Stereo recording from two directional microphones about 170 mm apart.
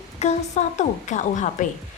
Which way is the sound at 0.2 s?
40° left (ahead or behind).